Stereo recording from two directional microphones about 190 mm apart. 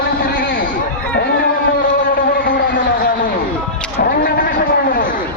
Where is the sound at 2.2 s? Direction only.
50° left (ahead or behind).